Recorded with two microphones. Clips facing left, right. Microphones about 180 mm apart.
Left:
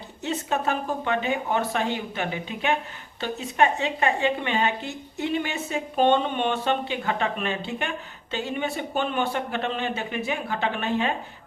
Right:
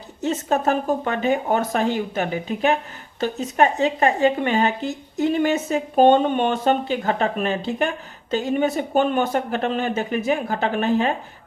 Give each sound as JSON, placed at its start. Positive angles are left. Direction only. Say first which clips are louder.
{"t": 0.2, "sound": "a woman's voice", "louder": "right 5 dB", "side_deg": -45}